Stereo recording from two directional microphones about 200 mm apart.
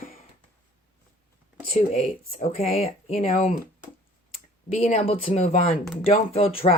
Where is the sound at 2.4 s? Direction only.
35° left (ahead or behind).